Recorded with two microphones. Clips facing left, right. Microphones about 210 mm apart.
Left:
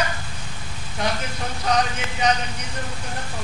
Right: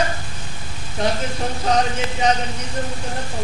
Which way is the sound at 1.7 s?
30° right (ahead or behind).